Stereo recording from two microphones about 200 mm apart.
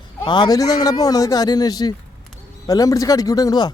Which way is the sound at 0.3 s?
20° left (ahead or behind).